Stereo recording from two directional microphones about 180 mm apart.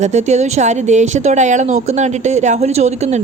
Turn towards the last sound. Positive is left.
turn(degrees=-40)  # may be behind; listen again after turning